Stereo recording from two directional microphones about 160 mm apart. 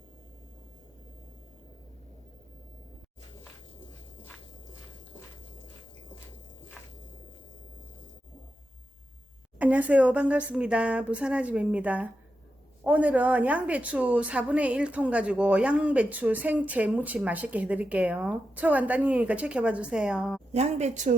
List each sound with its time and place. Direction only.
9.6 s a woman's voice: 10° right (ahead or behind)
20.5 s speech: 45° right (ahead or behind)